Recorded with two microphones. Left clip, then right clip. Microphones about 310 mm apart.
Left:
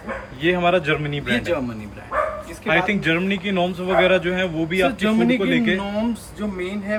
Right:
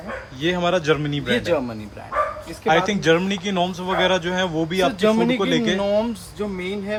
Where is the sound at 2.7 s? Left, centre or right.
Centre.